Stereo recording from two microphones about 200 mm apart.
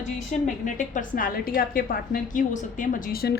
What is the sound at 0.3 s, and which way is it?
A woman's voice, 40° left (ahead or behind).